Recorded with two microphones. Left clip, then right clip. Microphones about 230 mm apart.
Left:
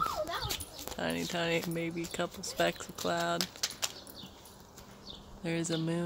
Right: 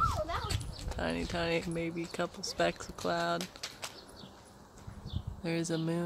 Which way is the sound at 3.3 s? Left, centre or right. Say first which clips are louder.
Left 5 dB; left.